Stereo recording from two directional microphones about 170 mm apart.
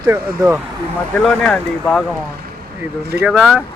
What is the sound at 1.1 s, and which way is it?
Speech, 5° left (ahead or behind).